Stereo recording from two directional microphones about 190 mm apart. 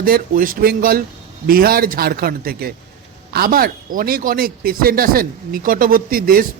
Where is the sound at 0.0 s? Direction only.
50° right (ahead or behind).